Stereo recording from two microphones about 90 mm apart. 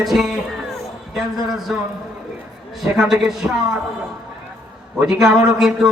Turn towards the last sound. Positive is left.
turn(degrees=-5)  # may be behind; listen again after turning